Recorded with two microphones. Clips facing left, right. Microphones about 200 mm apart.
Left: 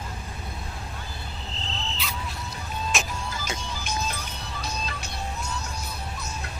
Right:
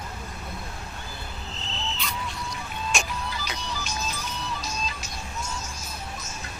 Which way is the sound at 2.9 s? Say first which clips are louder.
Even; centre (ahead or behind).